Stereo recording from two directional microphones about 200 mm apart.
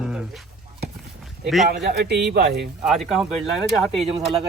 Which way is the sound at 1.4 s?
Centre (ahead or behind).